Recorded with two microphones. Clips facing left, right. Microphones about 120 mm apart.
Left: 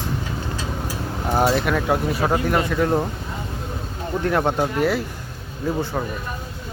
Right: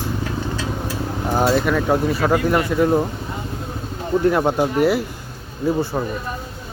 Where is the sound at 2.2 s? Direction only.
25° left (ahead or behind).